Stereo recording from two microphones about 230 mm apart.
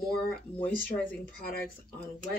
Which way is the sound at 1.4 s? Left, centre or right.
Left.